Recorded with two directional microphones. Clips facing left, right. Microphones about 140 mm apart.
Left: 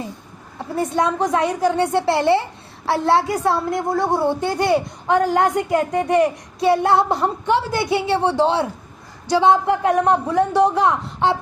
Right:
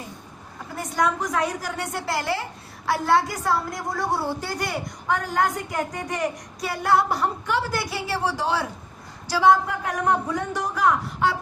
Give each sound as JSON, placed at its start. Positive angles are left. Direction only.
{"t": 0.8, "sound": "a woman's voice", "side_deg": 25}